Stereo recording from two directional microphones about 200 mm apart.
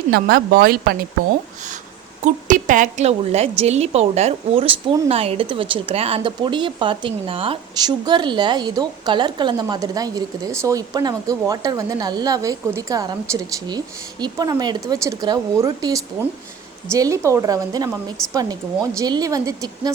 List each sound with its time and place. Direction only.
0.1 s speech: 50° right (ahead or behind)
2.2 s a woman's voice: 40° right (ahead or behind); by 19.9 s 20° right (ahead or behind)